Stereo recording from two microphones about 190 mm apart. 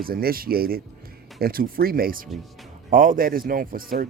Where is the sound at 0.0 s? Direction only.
50° right (ahead or behind).